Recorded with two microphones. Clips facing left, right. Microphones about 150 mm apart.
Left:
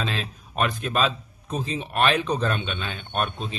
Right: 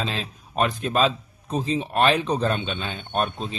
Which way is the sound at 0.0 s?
30° right (ahead or behind).